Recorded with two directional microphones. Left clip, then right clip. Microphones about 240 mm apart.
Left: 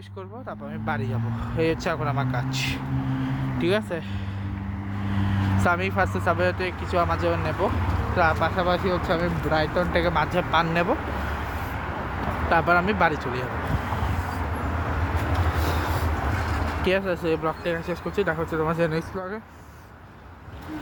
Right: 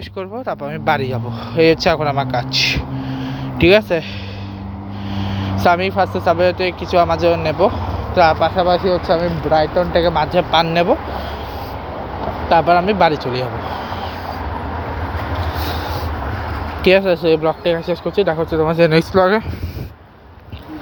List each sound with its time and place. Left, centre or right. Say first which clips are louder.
0.2 s speech: right 13 dB; right
3.6 s speech: right 14 dB; centre
5.1 s speech: right 5 dB; centre
12.5 s speech: right 8 dB; centre
16.8 s speech: right 12 dB; centre
18.9 s speech: right 17 dB; right